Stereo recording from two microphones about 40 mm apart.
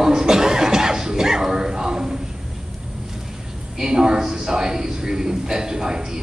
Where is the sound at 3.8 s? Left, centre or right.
Centre.